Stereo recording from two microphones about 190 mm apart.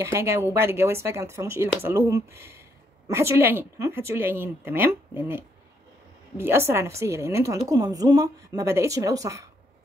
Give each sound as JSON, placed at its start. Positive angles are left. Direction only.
{"t": 0.0, "sound": "a woman's voice", "side_deg": -15}